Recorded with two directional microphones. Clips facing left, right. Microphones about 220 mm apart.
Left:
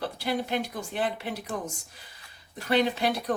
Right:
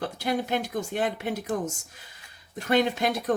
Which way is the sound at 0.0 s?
45° right (ahead or behind).